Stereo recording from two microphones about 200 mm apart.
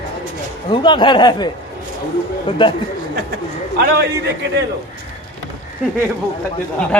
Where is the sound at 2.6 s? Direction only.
25° left (ahead or behind).